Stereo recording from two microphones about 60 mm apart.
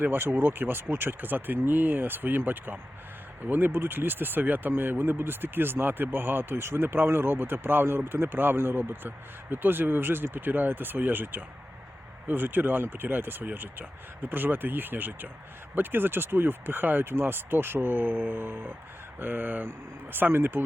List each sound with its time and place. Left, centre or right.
0.0 s speech: right